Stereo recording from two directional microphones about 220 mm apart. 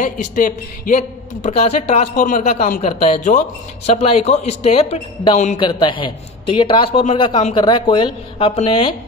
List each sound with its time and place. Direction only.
0.0 s a man's voice: 35° left (ahead or behind)